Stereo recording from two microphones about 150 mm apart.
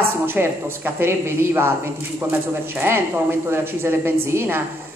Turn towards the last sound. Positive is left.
turn(degrees=-15)  # may be behind; listen again after turning